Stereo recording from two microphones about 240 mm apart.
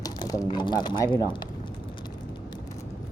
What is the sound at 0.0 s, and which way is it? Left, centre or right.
Speech, centre.